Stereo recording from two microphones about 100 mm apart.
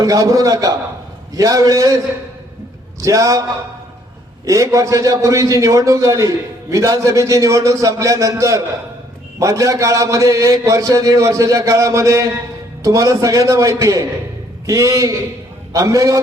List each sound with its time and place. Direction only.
0.0 s a man's voice: 35° right (ahead or behind)
3.0 s a man's voice: 35° right (ahead or behind)
4.4 s a man's voice: 35° right (ahead or behind)